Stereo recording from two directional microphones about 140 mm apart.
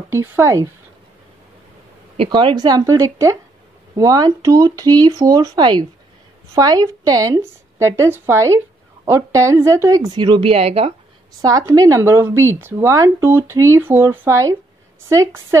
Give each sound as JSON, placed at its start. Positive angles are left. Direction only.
{"t": 0.1, "sound": "speech", "side_deg": -20}
{"t": 2.1, "sound": "speech", "side_deg": -35}
{"t": 11.4, "sound": "speech", "side_deg": -25}